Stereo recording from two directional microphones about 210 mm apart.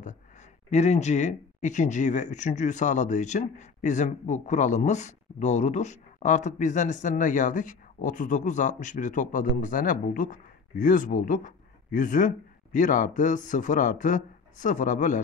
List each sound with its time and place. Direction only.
0.7 s speech: 30° left (ahead or behind)